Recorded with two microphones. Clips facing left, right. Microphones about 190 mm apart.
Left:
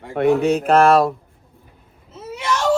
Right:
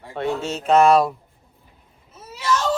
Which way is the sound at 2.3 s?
20° left (ahead or behind).